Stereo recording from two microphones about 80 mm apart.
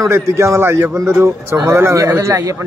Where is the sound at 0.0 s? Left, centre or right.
Right.